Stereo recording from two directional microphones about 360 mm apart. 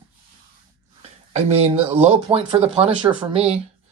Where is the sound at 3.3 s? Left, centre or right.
Centre.